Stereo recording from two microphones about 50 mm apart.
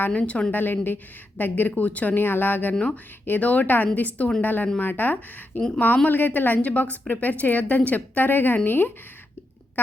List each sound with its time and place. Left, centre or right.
0.1 s a woman's voice: left
0.5 s a woman's voice: left
2.7 s a woman's voice: left